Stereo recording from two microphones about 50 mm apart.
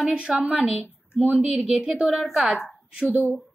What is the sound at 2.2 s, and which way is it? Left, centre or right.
Speech, centre.